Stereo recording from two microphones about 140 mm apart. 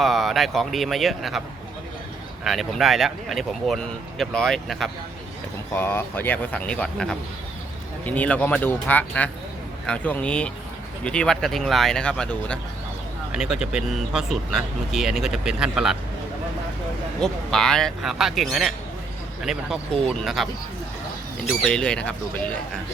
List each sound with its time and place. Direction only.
0.0 s speech: centre (ahead or behind)
2.4 s speech: centre (ahead or behind)
5.7 s speech: 15° left (ahead or behind)
13.3 s speech: 5° right (ahead or behind)
17.2 s speech: 5° left (ahead or behind)
21.6 s speech: 5° left (ahead or behind)